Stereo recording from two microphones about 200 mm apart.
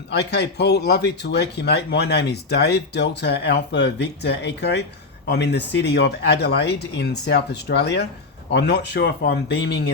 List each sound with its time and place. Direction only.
0.1 s speech: 55° left (ahead or behind)